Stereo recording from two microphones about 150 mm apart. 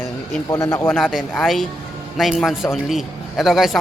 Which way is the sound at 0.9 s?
Centre (ahead or behind).